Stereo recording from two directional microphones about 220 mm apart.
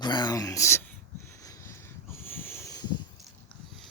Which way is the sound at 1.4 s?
15° left (ahead or behind).